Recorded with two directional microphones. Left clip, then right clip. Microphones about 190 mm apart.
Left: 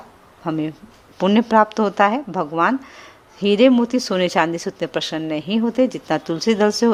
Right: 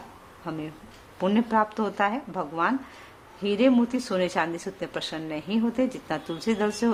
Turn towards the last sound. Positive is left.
turn(degrees=40)  # may be behind; listen again after turning